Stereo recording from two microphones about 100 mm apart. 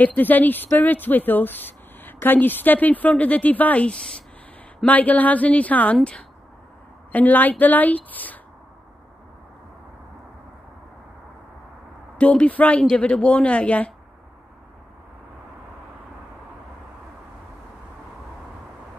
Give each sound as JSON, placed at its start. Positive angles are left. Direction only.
{"t": 0.0, "sound": "speech", "side_deg": 15}
{"t": 7.1, "sound": "speech", "side_deg": 15}
{"t": 12.2, "sound": "speech", "side_deg": 10}